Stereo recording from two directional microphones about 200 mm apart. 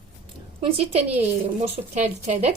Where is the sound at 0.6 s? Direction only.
30° right (ahead or behind).